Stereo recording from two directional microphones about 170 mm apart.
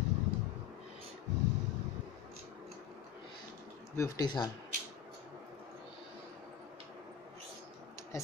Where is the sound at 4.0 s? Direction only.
25° left (ahead or behind).